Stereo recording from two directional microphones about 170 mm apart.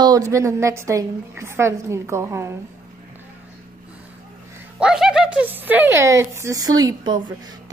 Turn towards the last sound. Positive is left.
turn(degrees=-25)  # may be behind; listen again after turning